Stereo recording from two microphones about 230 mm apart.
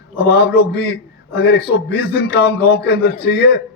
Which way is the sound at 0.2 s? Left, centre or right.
Left.